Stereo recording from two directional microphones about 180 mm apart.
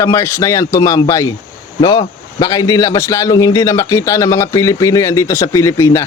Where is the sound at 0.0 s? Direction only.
15° left (ahead or behind).